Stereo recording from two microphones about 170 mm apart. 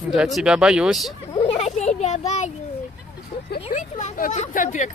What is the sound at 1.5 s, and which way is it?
Speech, 40° left (ahead or behind).